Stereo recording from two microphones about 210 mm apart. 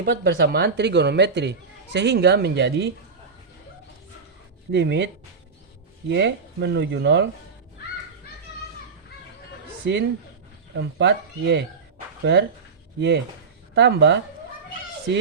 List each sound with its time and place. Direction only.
0.0 s speech: 45° right (ahead or behind)
4.7 s speech: 55° right (ahead or behind)
6.1 s speech: 55° right (ahead or behind)
9.8 s speech: 60° right (ahead or behind)